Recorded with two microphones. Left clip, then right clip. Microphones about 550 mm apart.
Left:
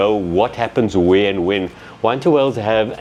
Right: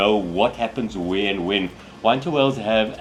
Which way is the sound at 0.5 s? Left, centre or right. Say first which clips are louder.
Left 9 dB; left.